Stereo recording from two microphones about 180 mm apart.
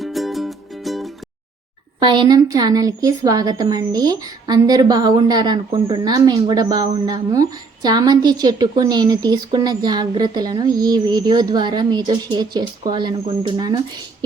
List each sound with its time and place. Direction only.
0.0 s music: centre (ahead or behind)
2.0 s a woman's voice: 25° right (ahead or behind)